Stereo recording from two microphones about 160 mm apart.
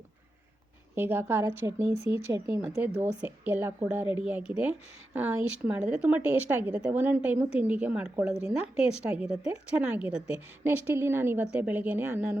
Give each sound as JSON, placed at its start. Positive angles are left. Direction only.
{"t": 0.9, "sound": "a woman's voice", "side_deg": -15}